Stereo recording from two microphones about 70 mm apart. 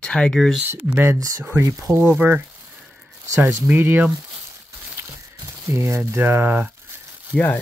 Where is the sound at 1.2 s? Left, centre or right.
Right.